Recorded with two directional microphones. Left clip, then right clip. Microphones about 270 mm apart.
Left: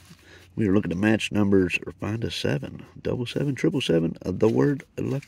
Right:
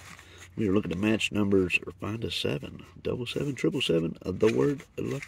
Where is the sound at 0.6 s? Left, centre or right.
Left.